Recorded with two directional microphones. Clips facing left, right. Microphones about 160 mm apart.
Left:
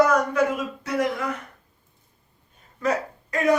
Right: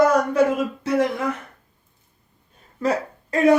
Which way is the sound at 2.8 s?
30° right (ahead or behind).